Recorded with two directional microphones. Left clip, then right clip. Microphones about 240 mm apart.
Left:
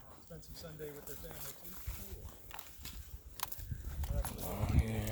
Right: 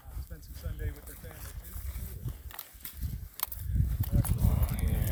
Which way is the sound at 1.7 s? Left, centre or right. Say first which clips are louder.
Right 2 dB; right.